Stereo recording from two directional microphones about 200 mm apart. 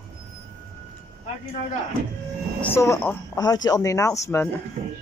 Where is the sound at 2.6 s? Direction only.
15° left (ahead or behind).